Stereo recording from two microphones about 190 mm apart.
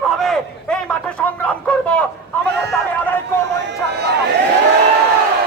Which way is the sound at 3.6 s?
65° right (ahead or behind).